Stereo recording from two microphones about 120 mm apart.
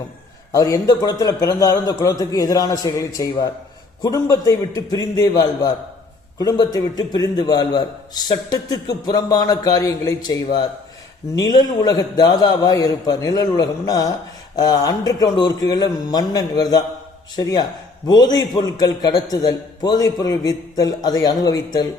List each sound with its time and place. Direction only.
0.5 s a man's voice: 30° left (ahead or behind)